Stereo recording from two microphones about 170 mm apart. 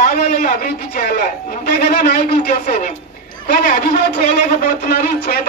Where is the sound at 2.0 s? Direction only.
70° left (ahead or behind).